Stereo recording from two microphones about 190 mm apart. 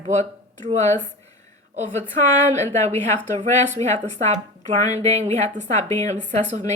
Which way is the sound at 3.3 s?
40° right (ahead or behind).